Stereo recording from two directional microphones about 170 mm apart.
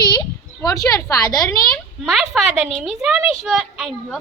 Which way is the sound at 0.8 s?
20° left (ahead or behind).